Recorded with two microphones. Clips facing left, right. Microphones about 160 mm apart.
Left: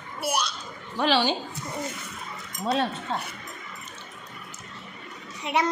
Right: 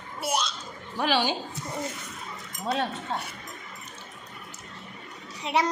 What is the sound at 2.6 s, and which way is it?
Speech, 15° right (ahead or behind).